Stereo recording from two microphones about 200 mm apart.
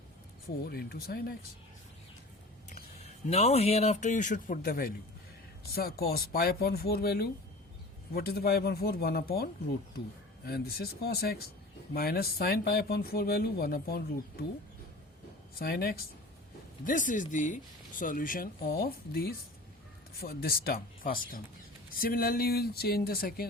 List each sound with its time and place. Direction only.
0.6 s speech: 50° left (ahead or behind)
2.6 s speech: 35° left (ahead or behind)
15.5 s speech: 50° left (ahead or behind)